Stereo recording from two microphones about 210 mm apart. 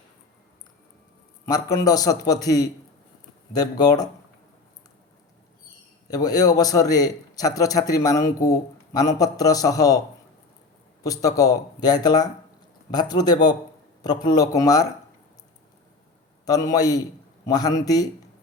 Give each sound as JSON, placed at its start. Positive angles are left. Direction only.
{"t": 1.7, "sound": "a man's voice", "side_deg": 15}
{"t": 6.1, "sound": "a man's voice", "side_deg": 15}
{"t": 11.0, "sound": "a man's voice", "side_deg": 15}
{"t": 16.5, "sound": "a man's voice", "side_deg": 15}